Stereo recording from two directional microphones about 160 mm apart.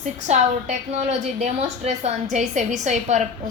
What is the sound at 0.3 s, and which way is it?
A woman's voice, 45° right (ahead or behind).